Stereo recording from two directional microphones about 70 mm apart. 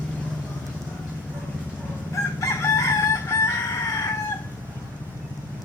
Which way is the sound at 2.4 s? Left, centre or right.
Left.